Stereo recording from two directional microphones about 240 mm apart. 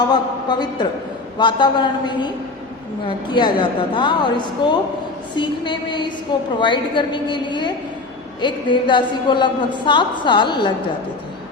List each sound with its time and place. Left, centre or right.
0.0 s a man's voice: centre